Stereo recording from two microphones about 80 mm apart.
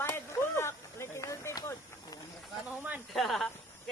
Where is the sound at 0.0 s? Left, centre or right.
Left.